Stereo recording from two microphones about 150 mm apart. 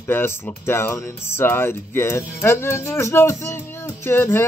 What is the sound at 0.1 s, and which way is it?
Speech, 15° left (ahead or behind).